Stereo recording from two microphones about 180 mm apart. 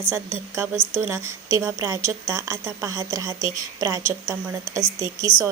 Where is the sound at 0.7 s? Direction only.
25° left (ahead or behind).